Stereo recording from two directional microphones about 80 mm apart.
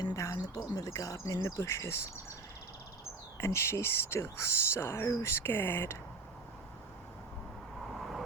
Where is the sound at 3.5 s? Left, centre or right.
Left.